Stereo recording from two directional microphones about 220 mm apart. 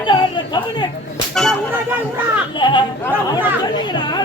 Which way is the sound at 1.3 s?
Centre (ahead or behind).